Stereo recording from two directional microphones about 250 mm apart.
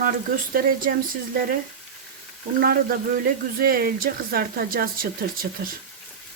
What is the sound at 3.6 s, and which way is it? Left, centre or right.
Speech, right.